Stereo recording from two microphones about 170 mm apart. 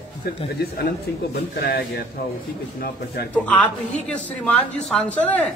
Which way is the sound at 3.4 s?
10° left (ahead or behind).